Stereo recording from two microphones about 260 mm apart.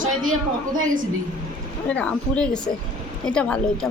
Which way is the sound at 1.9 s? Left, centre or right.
Centre.